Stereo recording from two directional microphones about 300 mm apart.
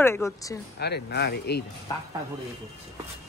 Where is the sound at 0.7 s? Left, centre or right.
Left.